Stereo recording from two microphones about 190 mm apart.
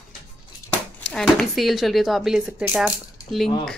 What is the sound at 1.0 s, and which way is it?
Speech, 5° left (ahead or behind).